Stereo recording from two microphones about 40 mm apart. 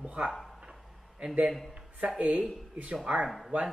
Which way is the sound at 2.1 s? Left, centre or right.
Right.